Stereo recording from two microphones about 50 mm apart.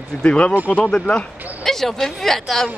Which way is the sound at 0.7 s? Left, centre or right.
Left.